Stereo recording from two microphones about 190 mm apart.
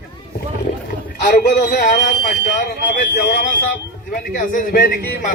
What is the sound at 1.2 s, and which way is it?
Speech, 55° left (ahead or behind).